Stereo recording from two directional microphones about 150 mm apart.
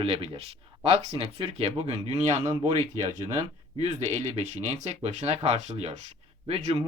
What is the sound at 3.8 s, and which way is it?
Speech, 50° right (ahead or behind).